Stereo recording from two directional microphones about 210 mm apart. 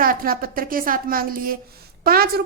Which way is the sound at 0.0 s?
45° right (ahead or behind).